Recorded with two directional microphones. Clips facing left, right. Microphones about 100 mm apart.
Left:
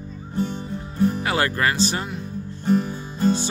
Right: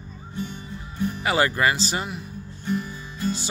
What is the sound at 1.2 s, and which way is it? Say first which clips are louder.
Speech: right 1 dB; 5° right (ahead or behind).